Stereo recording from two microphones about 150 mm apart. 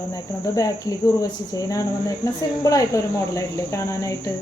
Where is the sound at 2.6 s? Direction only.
25° left (ahead or behind).